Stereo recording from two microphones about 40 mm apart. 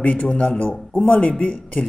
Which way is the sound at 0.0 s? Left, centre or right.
Left.